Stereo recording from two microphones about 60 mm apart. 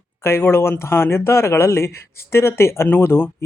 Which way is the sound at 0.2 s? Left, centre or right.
Left.